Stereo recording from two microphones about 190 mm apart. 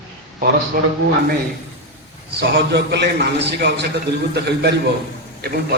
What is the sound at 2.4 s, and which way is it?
A man's voice, 60° right (ahead or behind).